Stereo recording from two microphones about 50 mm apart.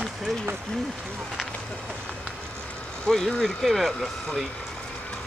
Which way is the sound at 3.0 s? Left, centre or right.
Centre.